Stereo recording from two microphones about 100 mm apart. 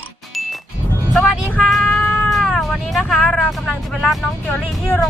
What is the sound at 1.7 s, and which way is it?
Music, 10° left (ahead or behind).